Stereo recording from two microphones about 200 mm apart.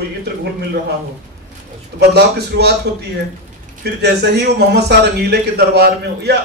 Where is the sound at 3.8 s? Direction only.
55° right (ahead or behind).